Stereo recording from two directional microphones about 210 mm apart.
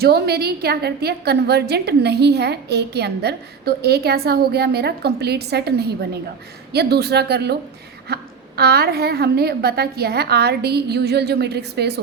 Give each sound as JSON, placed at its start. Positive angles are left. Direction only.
{"t": 0.0, "sound": "a woman's voice", "side_deg": -50}